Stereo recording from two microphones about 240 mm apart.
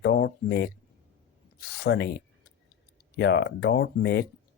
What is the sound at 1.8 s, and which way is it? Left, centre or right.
Speech, left.